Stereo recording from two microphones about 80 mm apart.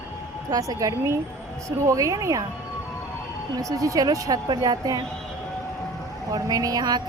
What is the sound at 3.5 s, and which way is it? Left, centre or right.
Speech, right.